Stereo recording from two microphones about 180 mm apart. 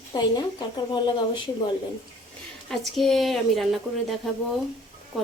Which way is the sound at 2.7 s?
Centre (ahead or behind).